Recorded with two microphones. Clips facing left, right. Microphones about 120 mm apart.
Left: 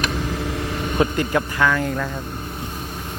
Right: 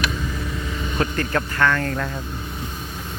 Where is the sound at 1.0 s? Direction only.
15° left (ahead or behind).